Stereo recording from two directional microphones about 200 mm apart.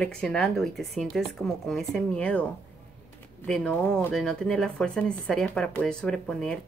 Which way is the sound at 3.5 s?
5° left (ahead or behind).